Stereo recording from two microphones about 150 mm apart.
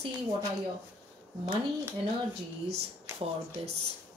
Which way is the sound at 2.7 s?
45° right (ahead or behind).